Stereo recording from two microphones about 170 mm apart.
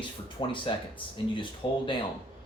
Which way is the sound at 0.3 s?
30° left (ahead or behind).